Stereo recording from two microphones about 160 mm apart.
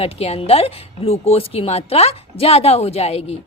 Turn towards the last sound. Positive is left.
turn(degrees=40)  # may be behind; listen again after turning